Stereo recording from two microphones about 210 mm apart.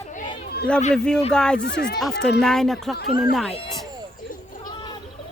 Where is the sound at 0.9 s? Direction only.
5° left (ahead or behind).